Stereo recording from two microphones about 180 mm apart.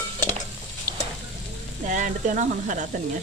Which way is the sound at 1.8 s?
45° right (ahead or behind).